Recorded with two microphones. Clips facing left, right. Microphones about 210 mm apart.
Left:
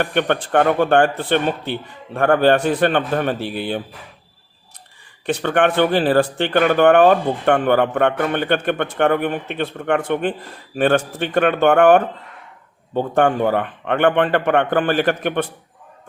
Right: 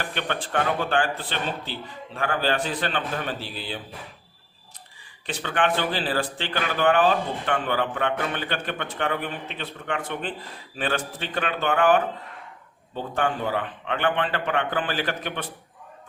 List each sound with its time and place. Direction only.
0.0 s speech: 60° left (ahead or behind)
5.2 s speech: 55° left (ahead or behind)